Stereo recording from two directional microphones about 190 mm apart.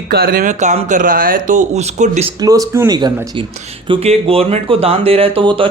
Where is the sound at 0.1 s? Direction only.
50° right (ahead or behind); by 2.3 s 35° right (ahead or behind).